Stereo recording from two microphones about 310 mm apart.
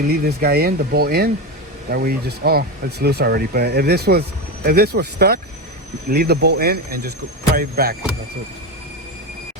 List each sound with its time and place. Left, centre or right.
0.1 s speech: right